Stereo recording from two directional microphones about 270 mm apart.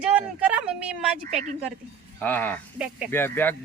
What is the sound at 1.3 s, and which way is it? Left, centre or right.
Speech, right.